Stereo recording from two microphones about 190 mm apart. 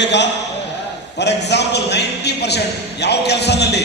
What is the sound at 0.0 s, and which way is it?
A man's voice, 65° left (ahead or behind).